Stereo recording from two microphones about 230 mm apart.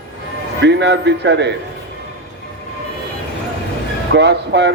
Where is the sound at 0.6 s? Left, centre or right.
Right.